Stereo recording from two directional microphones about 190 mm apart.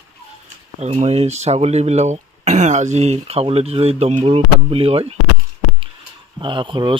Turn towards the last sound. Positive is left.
turn(degrees=-25)  # may be behind; listen again after turning